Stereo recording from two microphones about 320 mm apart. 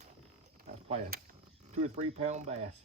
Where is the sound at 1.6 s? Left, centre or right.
Right.